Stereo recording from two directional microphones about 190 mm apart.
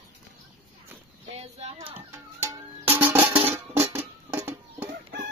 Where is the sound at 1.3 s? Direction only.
35° right (ahead or behind).